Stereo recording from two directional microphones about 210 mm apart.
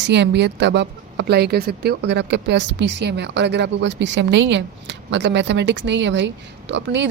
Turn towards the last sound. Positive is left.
turn(degrees=-55)  # may be behind; listen again after turning